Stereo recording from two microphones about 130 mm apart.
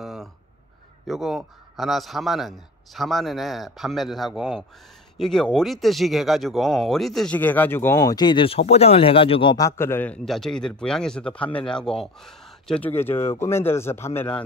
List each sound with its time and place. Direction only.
0.0 s a sound: centre (ahead or behind)
1.0 s a man's voice: centre (ahead or behind)
7.3 s speech: 15° left (ahead or behind)
8.0 s speech: 30° left (ahead or behind)
9.6 s speech: 20° left (ahead or behind)
12.9 s a man's voice: 20° left (ahead or behind)